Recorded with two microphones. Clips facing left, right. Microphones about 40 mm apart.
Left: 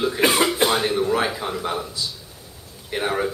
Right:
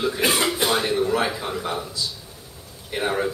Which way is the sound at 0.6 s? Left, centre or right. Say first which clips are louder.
Left 1 dB; centre.